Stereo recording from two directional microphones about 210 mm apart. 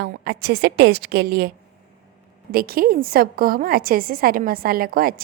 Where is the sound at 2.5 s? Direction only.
45° right (ahead or behind).